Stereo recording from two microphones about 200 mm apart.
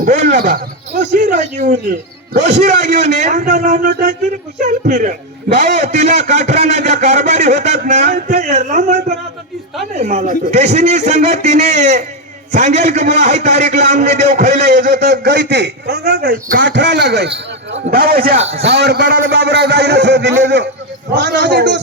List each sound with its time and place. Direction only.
0.0 s a man's voice: 40° right (ahead or behind)
15.0 s a man's voice: 60° right (ahead or behind)
16.6 s a man's voice: 65° right (ahead or behind); by 18.3 s 50° right (ahead or behind)
18.3 s a man's voice: 30° right (ahead or behind)
18.6 s a man's voice: 55° right (ahead or behind)